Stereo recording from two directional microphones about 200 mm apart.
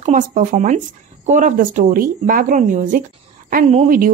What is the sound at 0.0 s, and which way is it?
Speech, 40° right (ahead or behind).